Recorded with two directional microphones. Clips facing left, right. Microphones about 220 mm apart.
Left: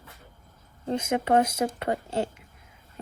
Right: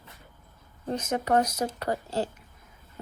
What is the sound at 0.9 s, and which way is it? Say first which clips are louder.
Speech: left 2 dB; 20° left (ahead or behind).